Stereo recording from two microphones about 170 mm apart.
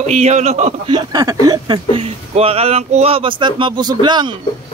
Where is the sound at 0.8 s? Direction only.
25° right (ahead or behind).